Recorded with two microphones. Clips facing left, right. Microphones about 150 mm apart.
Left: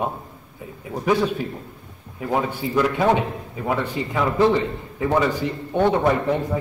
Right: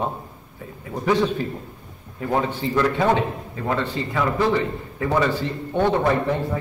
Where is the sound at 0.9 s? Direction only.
10° left (ahead or behind).